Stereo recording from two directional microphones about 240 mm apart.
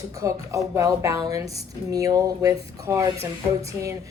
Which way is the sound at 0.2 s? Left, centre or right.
Centre.